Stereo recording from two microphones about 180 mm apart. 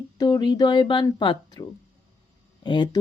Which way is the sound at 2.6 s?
25° left (ahead or behind).